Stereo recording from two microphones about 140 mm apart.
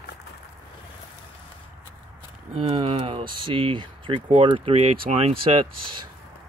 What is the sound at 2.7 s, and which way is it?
Speech, 45° right (ahead or behind).